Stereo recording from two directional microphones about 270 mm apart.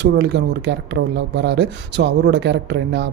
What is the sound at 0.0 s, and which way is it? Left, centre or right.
Speech, right.